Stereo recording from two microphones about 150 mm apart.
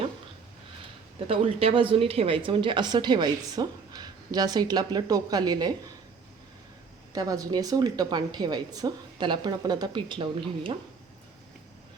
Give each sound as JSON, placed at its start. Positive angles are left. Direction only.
{"t": 1.3, "sound": "speech", "side_deg": -40}
{"t": 7.1, "sound": "speech", "side_deg": -25}